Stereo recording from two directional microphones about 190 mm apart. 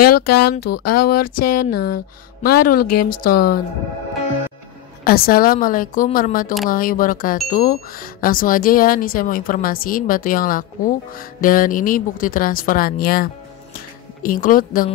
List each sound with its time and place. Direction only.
0.2 s speech: 55° left (ahead or behind)
5.0 s speech: 50° left (ahead or behind)